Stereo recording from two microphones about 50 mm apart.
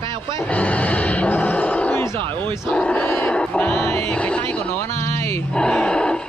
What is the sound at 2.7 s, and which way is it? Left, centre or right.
Battle cry, left.